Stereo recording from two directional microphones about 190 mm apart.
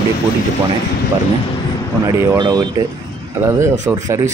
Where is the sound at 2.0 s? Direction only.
20° right (ahead or behind).